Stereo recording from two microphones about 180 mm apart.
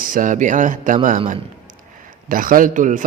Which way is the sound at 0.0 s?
50° right (ahead or behind).